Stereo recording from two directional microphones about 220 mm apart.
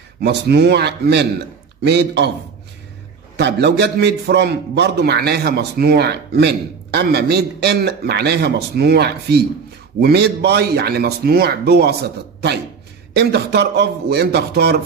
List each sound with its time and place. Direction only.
0.2 s a man's voice: 50° right (ahead or behind)
3.3 s a man's voice: 50° right (ahead or behind)